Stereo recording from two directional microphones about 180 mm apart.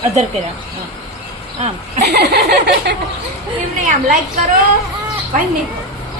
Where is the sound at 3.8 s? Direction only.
45° right (ahead or behind).